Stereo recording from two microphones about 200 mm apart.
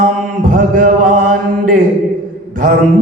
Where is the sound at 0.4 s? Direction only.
40° right (ahead or behind).